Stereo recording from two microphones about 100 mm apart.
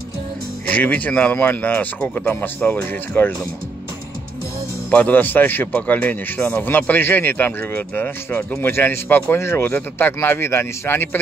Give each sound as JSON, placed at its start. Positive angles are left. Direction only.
{"t": 0.7, "sound": "speech", "side_deg": 15}
{"t": 4.9, "sound": "a man's voice", "side_deg": 15}